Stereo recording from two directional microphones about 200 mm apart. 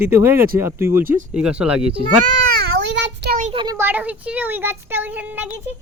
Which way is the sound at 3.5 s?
20° right (ahead or behind).